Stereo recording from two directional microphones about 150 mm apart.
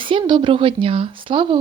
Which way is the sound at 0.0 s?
35° right (ahead or behind).